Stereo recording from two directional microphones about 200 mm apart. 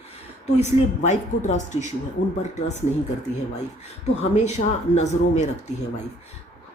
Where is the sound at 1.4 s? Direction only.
35° left (ahead or behind).